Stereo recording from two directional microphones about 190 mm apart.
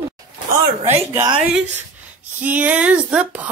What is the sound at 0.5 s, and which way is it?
Speech, 35° right (ahead or behind).